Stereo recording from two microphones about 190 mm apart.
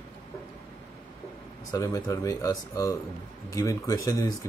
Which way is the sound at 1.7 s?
15° left (ahead or behind).